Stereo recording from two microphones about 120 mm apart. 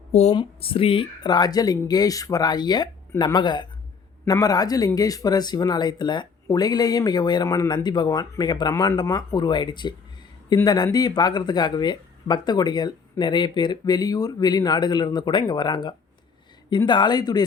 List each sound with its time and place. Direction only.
0.1 s speech: 65° left (ahead or behind)
0.3 s speech: 50° left (ahead or behind); by 17.4 s 35° left (ahead or behind)